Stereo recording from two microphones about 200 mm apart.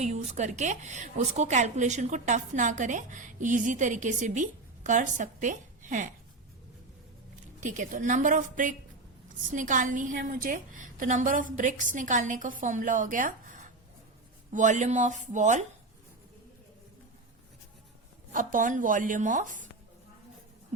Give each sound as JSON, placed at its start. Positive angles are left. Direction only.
{"t": 0.0, "sound": "a woman's voice", "side_deg": -35}
{"t": 7.6, "sound": "a woman's voice", "side_deg": -40}
{"t": 18.3, "sound": "a woman's voice", "side_deg": -40}